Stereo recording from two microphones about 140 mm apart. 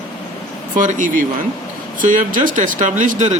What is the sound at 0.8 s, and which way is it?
Speech, 65° right (ahead or behind).